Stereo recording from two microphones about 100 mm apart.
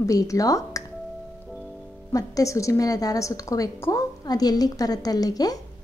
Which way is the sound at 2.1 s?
35° left (ahead or behind).